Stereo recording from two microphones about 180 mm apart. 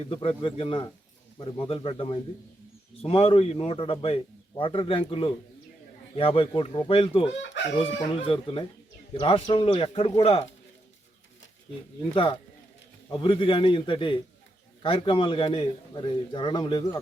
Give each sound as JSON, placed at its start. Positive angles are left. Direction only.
{"t": 0.1, "sound": "a man's voice", "side_deg": 30}
{"t": 12.1, "sound": "a man's voice", "side_deg": 30}